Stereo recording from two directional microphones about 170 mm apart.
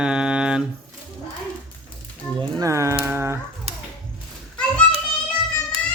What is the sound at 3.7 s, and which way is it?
Music, 35° right (ahead or behind).